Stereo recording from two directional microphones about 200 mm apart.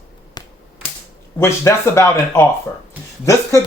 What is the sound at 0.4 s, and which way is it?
Finger snapping, 20° left (ahead or behind).